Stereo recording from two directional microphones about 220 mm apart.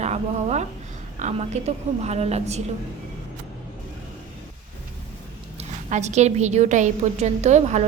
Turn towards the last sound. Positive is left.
turn(degrees=-30)  # may be behind; listen again after turning